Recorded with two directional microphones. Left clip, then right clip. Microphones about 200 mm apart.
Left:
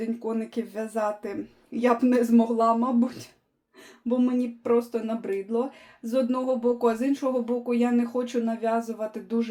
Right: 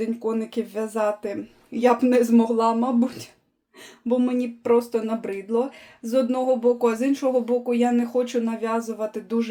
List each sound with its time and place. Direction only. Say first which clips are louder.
0.0 s speech: right 4 dB; 20° right (ahead or behind)